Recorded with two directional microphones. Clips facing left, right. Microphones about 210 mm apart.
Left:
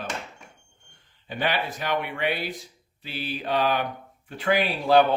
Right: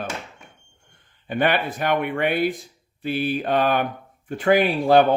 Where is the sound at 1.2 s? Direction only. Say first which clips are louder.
Right 6 dB; 55° right (ahead or behind).